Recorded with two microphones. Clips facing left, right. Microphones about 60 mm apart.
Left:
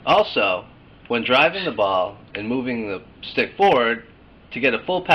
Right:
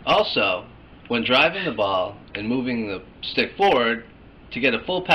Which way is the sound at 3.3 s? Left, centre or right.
Left.